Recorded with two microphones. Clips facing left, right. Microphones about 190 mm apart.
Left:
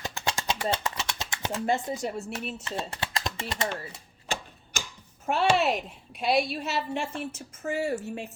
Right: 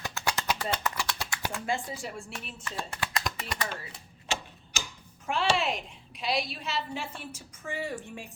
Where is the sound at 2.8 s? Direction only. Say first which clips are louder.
Right 1 dB; 25° left (ahead or behind).